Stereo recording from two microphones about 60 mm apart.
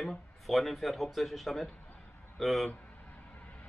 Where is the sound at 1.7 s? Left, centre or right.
Left.